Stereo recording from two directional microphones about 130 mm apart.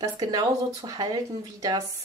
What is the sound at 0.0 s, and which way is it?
Speech, 30° right (ahead or behind).